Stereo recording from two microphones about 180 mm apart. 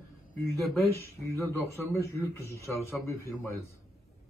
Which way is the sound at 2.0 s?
15° left (ahead or behind).